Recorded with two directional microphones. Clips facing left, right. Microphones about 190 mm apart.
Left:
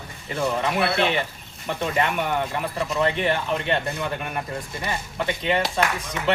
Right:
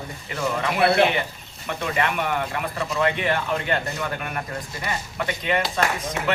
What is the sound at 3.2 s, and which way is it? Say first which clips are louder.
Speech: even; 25° left (ahead or behind).